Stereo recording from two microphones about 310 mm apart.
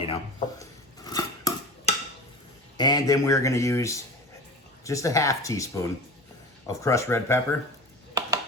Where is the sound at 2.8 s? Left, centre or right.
Centre.